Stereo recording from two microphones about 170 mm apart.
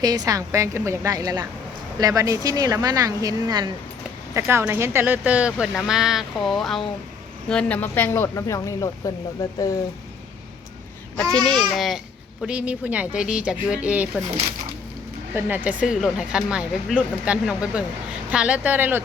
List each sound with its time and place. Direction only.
0.0 s speech: 20° right (ahead or behind); by 9.7 s 20° left (ahead or behind)
11.2 s speech: 5° left (ahead or behind)
15.4 s speech: 10° right (ahead or behind)